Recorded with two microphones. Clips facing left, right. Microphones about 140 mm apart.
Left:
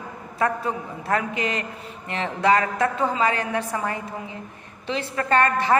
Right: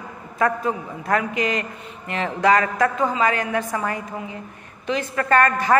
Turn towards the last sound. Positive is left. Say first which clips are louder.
# right 2 dB
turn(degrees=25)  # may be behind; listen again after turning